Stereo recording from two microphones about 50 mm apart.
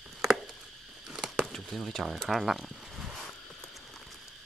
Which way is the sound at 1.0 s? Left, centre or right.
Centre.